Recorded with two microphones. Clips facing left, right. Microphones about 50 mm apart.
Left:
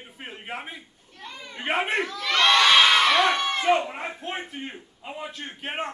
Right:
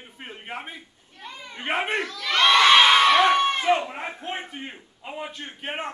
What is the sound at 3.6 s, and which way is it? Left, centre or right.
A man's voice, centre.